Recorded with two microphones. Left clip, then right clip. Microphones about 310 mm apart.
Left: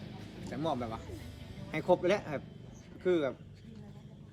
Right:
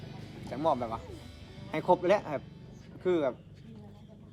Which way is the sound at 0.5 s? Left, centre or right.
Centre.